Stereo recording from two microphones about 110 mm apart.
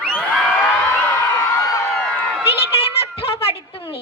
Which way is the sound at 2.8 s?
60° left (ahead or behind).